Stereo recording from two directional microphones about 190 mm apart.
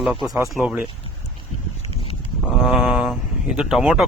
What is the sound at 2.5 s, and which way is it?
Speech, centre (ahead or behind).